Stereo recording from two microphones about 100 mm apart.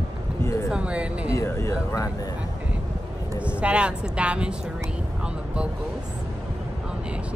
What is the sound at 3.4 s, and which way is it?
Speech, 10° right (ahead or behind).